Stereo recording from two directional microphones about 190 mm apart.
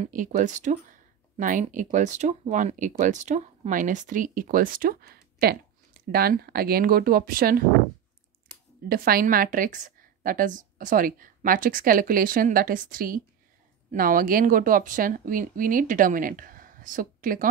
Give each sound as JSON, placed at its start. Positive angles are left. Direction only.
{"t": 0.0, "sound": "speech", "side_deg": -45}
{"t": 8.8, "sound": "speech", "side_deg": -50}